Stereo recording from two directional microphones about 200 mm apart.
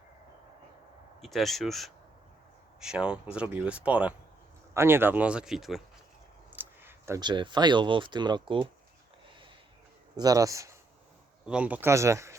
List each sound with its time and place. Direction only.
1.2 s speech: centre (ahead or behind); by 8.7 s 25° right (ahead or behind)
10.2 s speech: 15° right (ahead or behind)
11.4 s speech: 5° right (ahead or behind)